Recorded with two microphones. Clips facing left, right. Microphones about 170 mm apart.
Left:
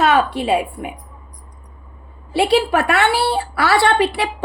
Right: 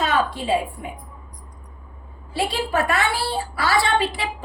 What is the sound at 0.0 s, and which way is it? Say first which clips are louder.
Speech: left 6 dB; 70° left (ahead or behind).